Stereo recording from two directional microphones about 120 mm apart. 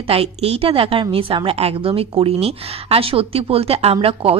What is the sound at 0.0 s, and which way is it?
A woman's voice, 50° right (ahead or behind).